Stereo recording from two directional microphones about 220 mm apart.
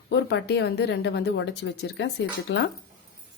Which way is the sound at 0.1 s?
50° left (ahead or behind).